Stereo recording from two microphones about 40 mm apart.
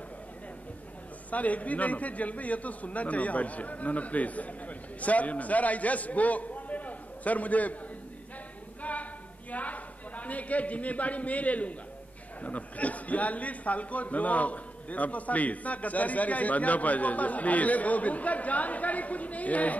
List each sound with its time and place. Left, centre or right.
1.3 s a man's voice: left
8.9 s a sound: left
9.5 s a man's voice: left